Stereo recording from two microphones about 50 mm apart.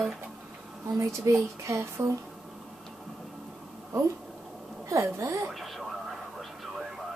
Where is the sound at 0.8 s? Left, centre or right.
Right.